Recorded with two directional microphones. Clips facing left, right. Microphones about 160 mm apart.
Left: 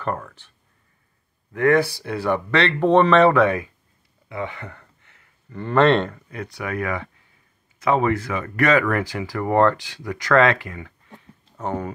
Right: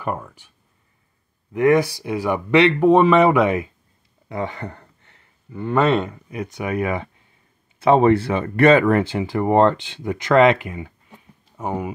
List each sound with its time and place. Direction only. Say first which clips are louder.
0.0 s speech: even; 10° right (ahead or behind)
1.5 s speech: right 2 dB; 15° right (ahead or behind)
4.3 s a sound: right 3 dB; 35° right (ahead or behind)
5.5 s speech: left 1 dB; 5° right (ahead or behind)